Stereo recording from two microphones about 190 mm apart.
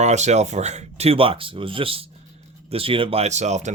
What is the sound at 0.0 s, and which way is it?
Speech, 35° right (ahead or behind).